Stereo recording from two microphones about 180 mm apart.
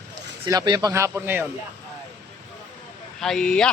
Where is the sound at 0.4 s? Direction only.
20° right (ahead or behind).